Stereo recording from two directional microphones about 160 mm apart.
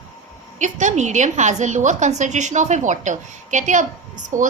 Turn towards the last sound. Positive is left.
turn(degrees=-55)  # may be behind; listen again after turning